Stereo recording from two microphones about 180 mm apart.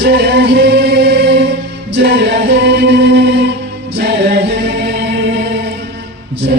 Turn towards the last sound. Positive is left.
turn(degrees=-60)  # may be behind; listen again after turning